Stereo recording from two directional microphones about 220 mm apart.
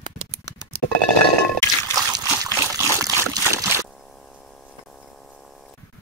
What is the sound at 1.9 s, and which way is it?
Trickle, 15° right (ahead or behind).